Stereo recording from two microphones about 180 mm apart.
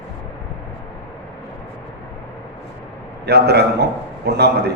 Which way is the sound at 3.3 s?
65° right (ahead or behind).